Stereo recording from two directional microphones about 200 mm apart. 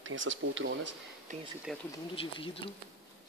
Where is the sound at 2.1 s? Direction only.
25° left (ahead or behind).